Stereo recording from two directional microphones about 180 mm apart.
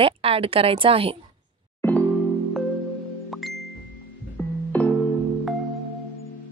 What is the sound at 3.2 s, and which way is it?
Music, centre (ahead or behind).